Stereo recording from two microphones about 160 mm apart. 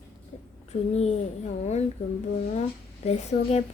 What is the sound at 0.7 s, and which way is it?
Speech, 40° left (ahead or behind).